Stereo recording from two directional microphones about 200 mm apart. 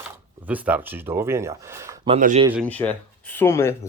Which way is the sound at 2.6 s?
10° left (ahead or behind).